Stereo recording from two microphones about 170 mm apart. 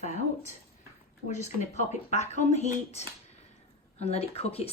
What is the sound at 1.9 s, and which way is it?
Speech, 40° left (ahead or behind).